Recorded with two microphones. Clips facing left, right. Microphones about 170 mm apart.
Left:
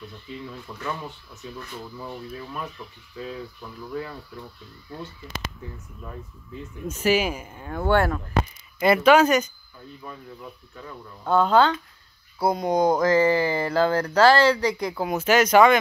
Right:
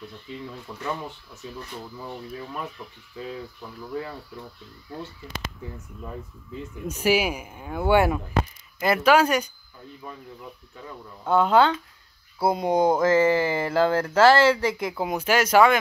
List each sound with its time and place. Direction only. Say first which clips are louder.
0.7 s speech: right 1 dB; 15° right (ahead or behind)
6.9 s speech: even; 10° right (ahead or behind)
8.7 s speech: left 4 dB; 5° left (ahead or behind)
9.0 s speech: left 2 dB; 10° right (ahead or behind)
11.2 s speech: even; 20° right (ahead or behind)